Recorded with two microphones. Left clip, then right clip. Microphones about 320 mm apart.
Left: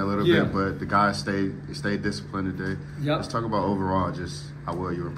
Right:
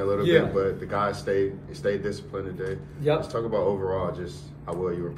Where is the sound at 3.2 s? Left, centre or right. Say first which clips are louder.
Right 1 dB; left.